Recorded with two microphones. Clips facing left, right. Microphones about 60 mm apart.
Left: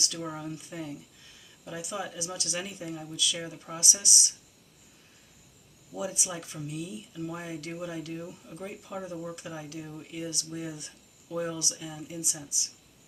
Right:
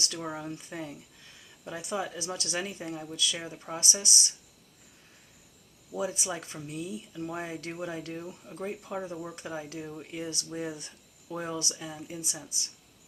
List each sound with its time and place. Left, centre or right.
0.2 s speech: right
5.9 s speech: right
7.3 s speech: right